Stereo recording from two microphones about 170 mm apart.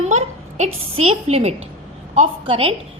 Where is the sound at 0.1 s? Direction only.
45° right (ahead or behind).